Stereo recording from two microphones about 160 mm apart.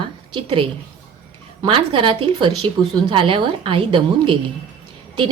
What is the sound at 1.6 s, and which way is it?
A woman's voice, 35° right (ahead or behind).